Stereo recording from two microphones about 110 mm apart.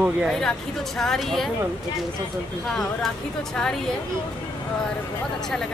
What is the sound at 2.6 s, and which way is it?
A woman's voice, 5° left (ahead or behind).